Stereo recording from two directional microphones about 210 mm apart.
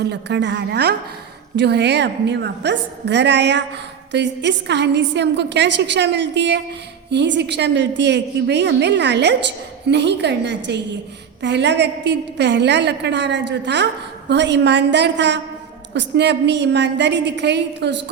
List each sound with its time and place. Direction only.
0.0 s a woman's voice: 55° right (ahead or behind)